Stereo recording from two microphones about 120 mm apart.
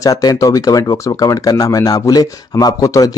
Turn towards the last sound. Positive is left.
turn(degrees=30)  # may be behind; listen again after turning